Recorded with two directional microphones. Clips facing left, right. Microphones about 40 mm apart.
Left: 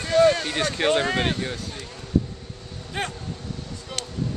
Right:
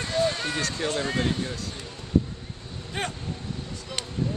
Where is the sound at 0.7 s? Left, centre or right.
Left.